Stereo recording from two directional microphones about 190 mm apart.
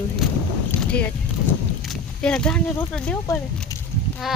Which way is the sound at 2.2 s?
5° left (ahead or behind).